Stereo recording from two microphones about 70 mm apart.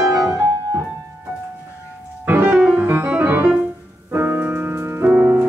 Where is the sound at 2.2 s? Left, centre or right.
Right.